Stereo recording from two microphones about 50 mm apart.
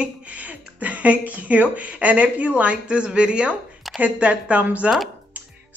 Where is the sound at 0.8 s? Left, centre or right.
Right.